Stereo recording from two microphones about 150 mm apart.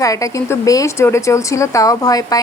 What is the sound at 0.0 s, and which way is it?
A woman's voice, 20° left (ahead or behind).